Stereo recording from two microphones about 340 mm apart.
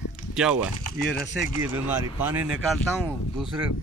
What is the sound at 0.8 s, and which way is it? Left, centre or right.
Speech, left.